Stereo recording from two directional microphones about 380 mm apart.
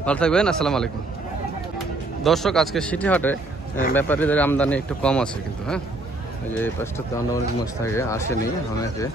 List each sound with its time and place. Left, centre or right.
0.0 s speech: centre
2.2 s speech: centre